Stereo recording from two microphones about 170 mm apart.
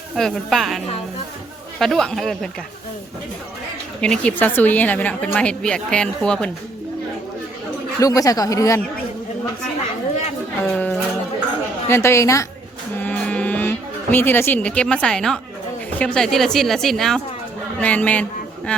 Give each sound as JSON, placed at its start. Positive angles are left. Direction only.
{"t": 0.2, "sound": "speech", "side_deg": 0}
{"t": 1.8, "sound": "speech", "side_deg": 0}
{"t": 4.0, "sound": "a woman's voice", "side_deg": 5}
{"t": 7.9, "sound": "speech", "side_deg": 20}
{"t": 10.6, "sound": "a woman's voice", "side_deg": 10}
{"t": 13.0, "sound": "a sound", "side_deg": 10}
{"t": 16.0, "sound": "a man's voice", "side_deg": 5}